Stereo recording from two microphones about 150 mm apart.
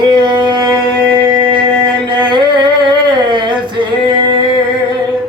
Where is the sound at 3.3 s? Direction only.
30° right (ahead or behind).